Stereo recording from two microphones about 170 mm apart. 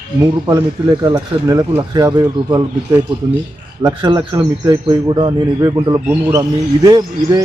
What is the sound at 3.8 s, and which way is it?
A man's voice, 25° right (ahead or behind).